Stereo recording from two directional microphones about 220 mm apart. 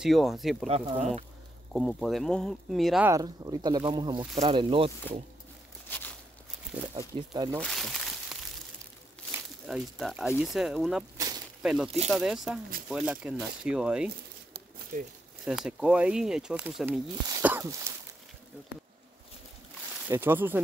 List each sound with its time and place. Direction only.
0.0 s speech: centre (ahead or behind)
0.7 s speech: 25° right (ahead or behind)
1.7 s speech: centre (ahead or behind)
3.1 s speech: 15° right (ahead or behind)
5.9 s a sound: 10° left (ahead or behind)
7.0 s speech: 15° right (ahead or behind)
7.6 s a sound: centre (ahead or behind)
9.7 s speech: centre (ahead or behind)
11.1 s a sound: 15° right (ahead or behind)
11.6 s speech: centre (ahead or behind)
14.9 s speech: 35° right (ahead or behind)
15.4 s speech: centre (ahead or behind)
17.3 s throat clearing: 10° right (ahead or behind)
20.1 s speech: 10° right (ahead or behind)